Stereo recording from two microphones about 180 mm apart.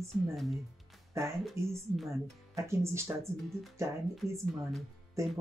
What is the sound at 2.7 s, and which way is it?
Speech, 15° right (ahead or behind).